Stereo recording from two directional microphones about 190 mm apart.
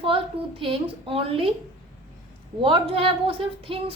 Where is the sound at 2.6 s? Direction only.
30° right (ahead or behind).